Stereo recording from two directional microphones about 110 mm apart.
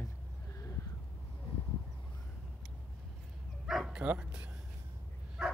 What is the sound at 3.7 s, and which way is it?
Bow-wow, 5° right (ahead or behind).